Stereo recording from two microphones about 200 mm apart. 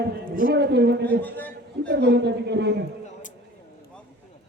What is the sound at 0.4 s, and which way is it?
Speech, 60° right (ahead or behind).